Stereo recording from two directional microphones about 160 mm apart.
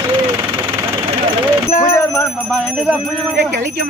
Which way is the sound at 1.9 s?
15° left (ahead or behind).